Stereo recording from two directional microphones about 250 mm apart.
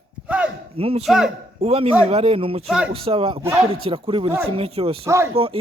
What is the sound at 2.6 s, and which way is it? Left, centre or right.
Speech, centre.